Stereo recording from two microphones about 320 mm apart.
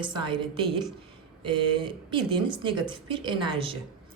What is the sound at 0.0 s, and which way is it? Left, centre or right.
Speech, centre.